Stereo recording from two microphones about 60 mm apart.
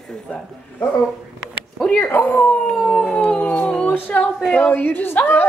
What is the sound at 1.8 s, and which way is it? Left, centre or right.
Speech, centre.